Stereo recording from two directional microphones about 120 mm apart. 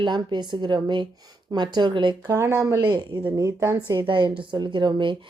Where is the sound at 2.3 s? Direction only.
25° right (ahead or behind).